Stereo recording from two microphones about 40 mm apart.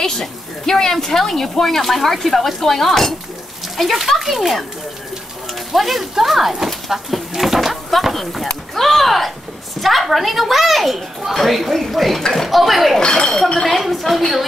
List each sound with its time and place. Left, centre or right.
0.2 s a woman's voice: centre